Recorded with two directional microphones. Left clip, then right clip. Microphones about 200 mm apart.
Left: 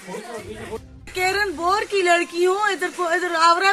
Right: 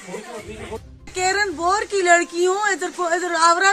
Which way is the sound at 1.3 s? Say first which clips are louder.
Right 1 dB; 25° right (ahead or behind).